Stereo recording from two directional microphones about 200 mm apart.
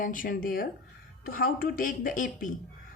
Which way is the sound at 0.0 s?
45° left (ahead or behind).